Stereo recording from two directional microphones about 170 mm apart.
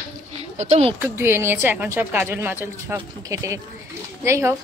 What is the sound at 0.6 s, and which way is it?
Speech, 35° right (ahead or behind).